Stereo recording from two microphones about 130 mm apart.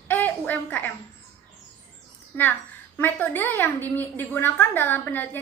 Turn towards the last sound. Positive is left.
turn(degrees=15)  # may be behind; listen again after turning